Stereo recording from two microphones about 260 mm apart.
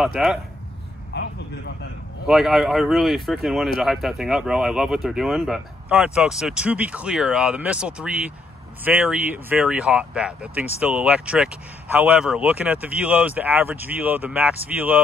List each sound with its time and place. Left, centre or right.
0.0 s speech: centre
1.1 s vehicle: left
2.2 s speech: centre